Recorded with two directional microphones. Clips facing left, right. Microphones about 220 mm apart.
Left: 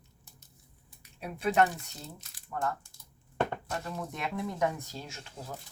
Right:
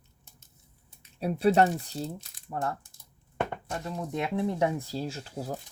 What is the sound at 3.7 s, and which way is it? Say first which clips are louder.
Speech: right 3 dB; 20° right (ahead or behind).